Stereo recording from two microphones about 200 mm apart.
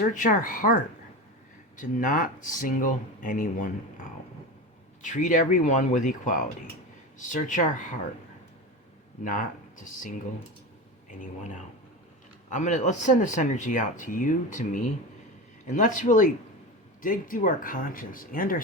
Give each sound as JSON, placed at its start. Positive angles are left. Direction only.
{"t": 0.0, "sound": "speech", "side_deg": 40}
{"t": 5.0, "sound": "speech", "side_deg": 40}
{"t": 9.2, "sound": "speech", "side_deg": 40}
{"t": 12.5, "sound": "speech", "side_deg": 40}